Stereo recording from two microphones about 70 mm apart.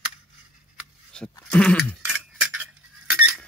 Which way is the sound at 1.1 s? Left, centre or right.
Centre.